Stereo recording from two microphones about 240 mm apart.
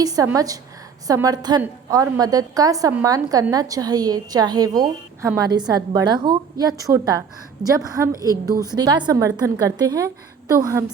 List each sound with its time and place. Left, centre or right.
0.0 s a woman's voice: centre